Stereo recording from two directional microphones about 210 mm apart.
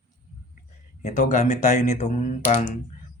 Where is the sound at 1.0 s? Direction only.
35° left (ahead or behind).